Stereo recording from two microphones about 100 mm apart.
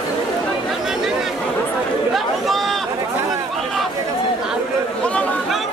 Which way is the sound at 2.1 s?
Centre (ahead or behind).